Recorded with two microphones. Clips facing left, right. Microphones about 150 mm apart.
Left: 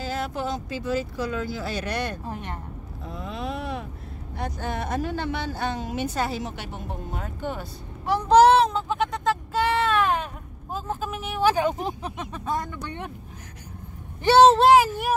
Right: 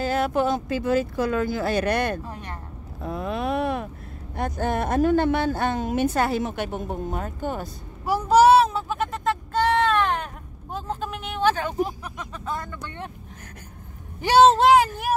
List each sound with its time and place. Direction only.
0.0 s speech: 55° right (ahead or behind)
2.2 s speech: 25° left (ahead or behind)
3.0 s vehicle: 60° right (ahead or behind)
4.4 s speech: 50° right (ahead or behind)
8.0 s a sound: 5° right (ahead or behind); by 11.7 s 10° left (ahead or behind)
11.8 s speech: 25° left (ahead or behind)
14.4 s speech: centre (ahead or behind)